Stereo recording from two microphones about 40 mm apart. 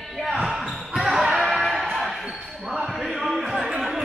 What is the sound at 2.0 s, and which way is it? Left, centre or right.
Basketball bounce, centre.